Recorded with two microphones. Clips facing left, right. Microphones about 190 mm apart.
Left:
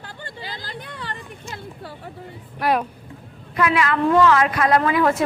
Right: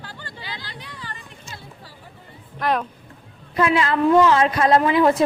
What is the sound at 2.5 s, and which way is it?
Speech, 10° left (ahead or behind).